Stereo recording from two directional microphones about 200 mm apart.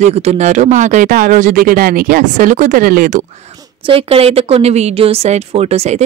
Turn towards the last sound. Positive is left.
turn(degrees=-35)  # may be behind; listen again after turning